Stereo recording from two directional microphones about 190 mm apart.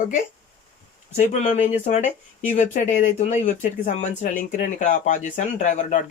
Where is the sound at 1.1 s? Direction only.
40° left (ahead or behind).